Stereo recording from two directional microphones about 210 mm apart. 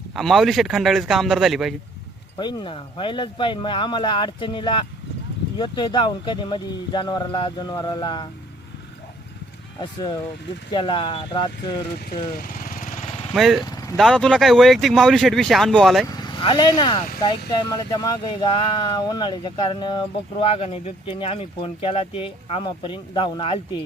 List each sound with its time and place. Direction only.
0.2 s speech: centre (ahead or behind)
2.4 s speech: 20° left (ahead or behind)
9.8 s speech: 25° left (ahead or behind)
12.3 s lawn mower: 45° left (ahead or behind)
13.3 s speech: centre (ahead or behind)
16.0 s speech: 20° left (ahead or behind)